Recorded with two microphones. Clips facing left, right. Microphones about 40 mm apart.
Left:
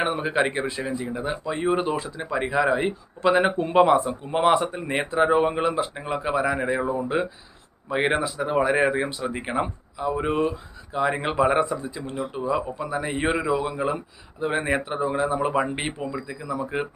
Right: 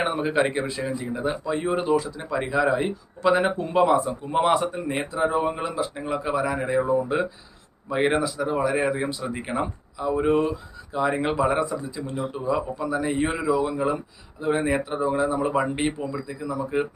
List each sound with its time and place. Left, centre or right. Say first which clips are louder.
0.0 s speech: even; centre
5.2 s speech: left 3 dB; left
5.5 s speech: left 3 dB; left
8.4 s speech: left 5 dB; left